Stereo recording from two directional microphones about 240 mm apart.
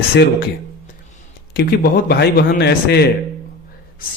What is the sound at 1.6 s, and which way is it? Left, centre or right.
Speech, left.